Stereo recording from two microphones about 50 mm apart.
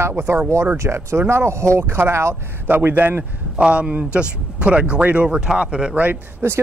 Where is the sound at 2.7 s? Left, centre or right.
Right.